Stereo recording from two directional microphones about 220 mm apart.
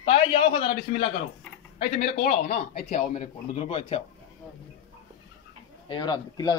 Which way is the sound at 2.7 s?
30° left (ahead or behind).